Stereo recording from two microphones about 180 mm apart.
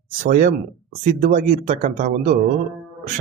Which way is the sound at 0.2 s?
50° right (ahead or behind).